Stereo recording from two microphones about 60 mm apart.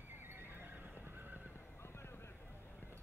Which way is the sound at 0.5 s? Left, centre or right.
Right.